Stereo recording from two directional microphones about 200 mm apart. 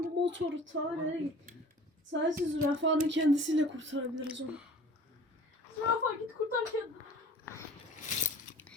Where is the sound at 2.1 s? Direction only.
65° right (ahead or behind).